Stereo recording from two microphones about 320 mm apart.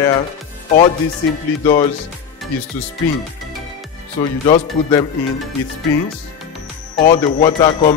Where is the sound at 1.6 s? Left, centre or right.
Centre.